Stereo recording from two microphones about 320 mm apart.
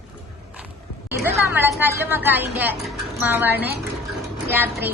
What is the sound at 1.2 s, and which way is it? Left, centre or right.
Speech, centre.